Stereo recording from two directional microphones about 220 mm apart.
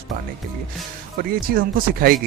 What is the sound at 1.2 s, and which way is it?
Speech, 40° right (ahead or behind).